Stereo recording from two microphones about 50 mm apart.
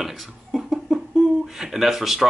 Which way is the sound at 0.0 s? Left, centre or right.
Centre.